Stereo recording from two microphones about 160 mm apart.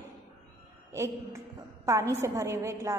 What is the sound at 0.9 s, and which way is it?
A woman's voice, 15° right (ahead or behind).